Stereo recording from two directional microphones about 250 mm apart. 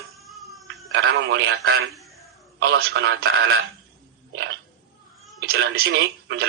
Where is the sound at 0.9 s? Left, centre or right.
Right.